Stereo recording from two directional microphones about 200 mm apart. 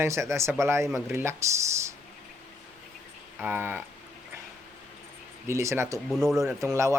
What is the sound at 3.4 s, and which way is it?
Speech, 10° right (ahead or behind).